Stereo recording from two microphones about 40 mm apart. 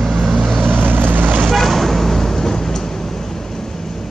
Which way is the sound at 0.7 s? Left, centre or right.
Right.